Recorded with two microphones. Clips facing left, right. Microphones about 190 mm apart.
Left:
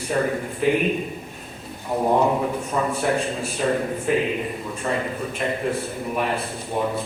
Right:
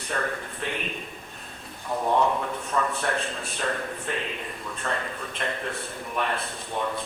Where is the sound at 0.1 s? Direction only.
20° left (ahead or behind).